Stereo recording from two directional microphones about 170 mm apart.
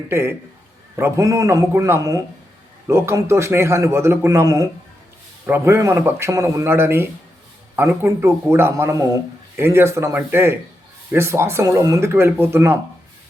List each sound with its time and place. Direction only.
0.1 s a man's voice: 15° right (ahead or behind)